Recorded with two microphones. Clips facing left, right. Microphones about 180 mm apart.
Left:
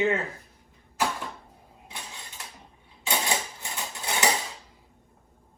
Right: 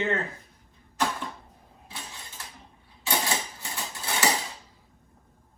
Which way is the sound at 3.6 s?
15° left (ahead or behind).